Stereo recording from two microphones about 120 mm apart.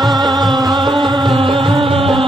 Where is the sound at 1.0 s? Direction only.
45° right (ahead or behind).